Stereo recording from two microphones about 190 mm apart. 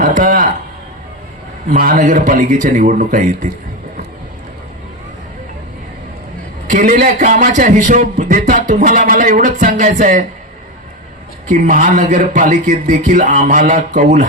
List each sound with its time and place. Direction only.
0.0 s a sound: 45° right (ahead or behind)
1.7 s a man's voice: 50° right (ahead or behind)
6.7 s a man's voice: 45° right (ahead or behind)
11.4 s a man's voice: 40° right (ahead or behind)